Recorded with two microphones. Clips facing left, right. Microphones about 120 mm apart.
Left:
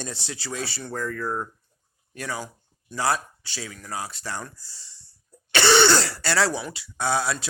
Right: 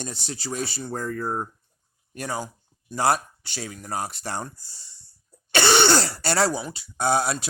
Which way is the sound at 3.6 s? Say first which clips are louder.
Right 3 dB; 35° right (ahead or behind).